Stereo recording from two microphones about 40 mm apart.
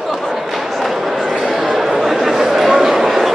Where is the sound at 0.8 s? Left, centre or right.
Centre.